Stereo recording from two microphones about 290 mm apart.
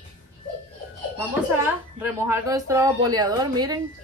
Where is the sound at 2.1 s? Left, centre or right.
Centre.